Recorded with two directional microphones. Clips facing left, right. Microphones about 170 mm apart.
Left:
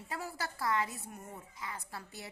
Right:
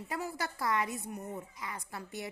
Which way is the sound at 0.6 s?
20° right (ahead or behind).